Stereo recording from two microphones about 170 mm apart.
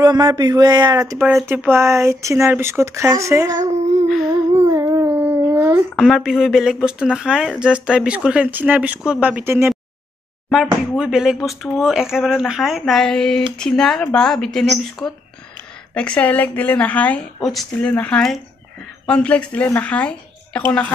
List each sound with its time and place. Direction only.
0.0 s speech: 25° right (ahead or behind)
4.7 s a sound: 15° right (ahead or behind)
5.9 s speech: centre (ahead or behind)
10.5 s speech: 5° right (ahead or behind)